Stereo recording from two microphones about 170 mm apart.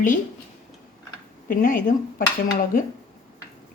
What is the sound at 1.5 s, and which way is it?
Speech, 55° left (ahead or behind).